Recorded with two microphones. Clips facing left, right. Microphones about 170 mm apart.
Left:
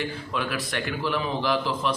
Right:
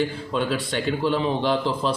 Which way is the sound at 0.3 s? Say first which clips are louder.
Right 5 dB; 30° right (ahead or behind).